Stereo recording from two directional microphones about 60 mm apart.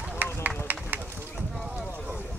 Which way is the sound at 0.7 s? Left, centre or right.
Right.